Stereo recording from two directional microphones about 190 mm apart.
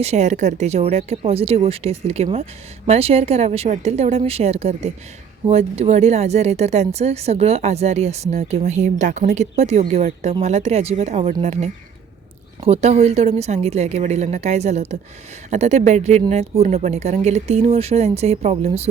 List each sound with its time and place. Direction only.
0.0 s speech: 35° right (ahead or behind)